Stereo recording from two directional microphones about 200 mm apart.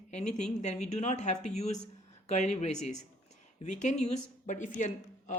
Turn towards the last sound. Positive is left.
turn(degrees=40)  # may be behind; listen again after turning